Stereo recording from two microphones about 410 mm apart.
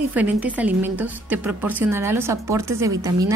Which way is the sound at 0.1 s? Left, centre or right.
Centre.